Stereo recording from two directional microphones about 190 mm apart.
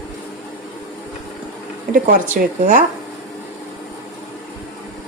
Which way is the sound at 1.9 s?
50° right (ahead or behind).